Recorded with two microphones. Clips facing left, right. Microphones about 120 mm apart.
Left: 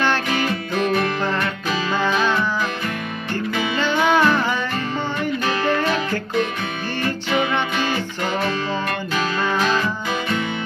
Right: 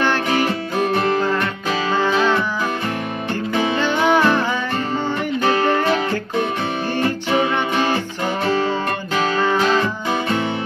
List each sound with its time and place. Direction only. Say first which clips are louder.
0.0 s music: right 2 dB; 15° right (ahead or behind)
2.0 s music: right 3 dB; 20° right (ahead or behind)
3.7 s music: even; 15° right (ahead or behind)
5.7 s music: right 2 dB; 20° right (ahead or behind)
7.2 s music: even; 25° right (ahead or behind)